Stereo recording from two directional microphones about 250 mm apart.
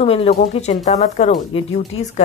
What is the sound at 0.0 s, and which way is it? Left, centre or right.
Speech, left.